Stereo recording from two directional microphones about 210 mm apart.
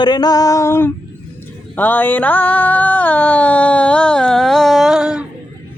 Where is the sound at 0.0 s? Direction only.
20° left (ahead or behind).